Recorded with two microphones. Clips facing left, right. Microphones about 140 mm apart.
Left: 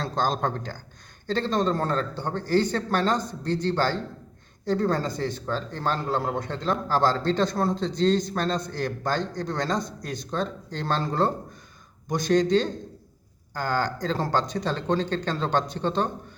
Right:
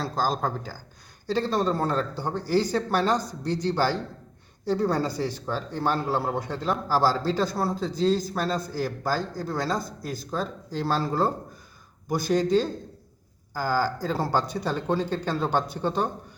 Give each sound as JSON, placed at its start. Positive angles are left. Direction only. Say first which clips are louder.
{"t": 0.0, "sound": "a man's voice", "louder": "left 1 dB", "side_deg": -5}